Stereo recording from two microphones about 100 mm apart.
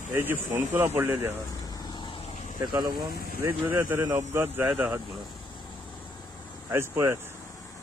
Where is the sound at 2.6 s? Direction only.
40° right (ahead or behind).